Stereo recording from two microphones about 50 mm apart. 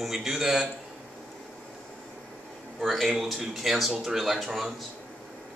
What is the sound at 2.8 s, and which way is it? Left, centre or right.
Speech, centre.